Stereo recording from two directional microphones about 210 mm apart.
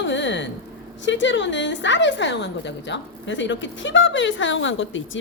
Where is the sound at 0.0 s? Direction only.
60° left (ahead or behind).